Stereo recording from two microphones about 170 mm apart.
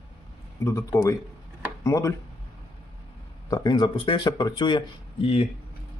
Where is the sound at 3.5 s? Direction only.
25° left (ahead or behind).